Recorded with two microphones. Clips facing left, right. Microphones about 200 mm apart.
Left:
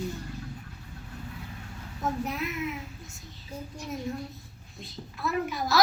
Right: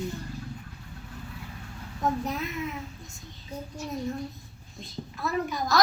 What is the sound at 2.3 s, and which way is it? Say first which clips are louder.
Speech: even; 35° right (ahead or behind).